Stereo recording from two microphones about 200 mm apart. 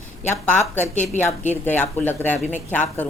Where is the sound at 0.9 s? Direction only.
40° left (ahead or behind).